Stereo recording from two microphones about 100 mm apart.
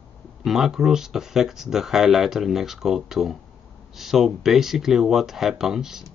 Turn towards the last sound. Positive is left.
turn(degrees=-5)  # may be behind; listen again after turning